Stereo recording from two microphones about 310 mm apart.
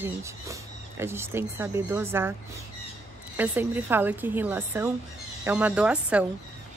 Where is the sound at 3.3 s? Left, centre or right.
Centre.